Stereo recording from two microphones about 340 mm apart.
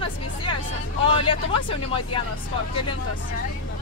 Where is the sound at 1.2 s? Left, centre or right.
Centre.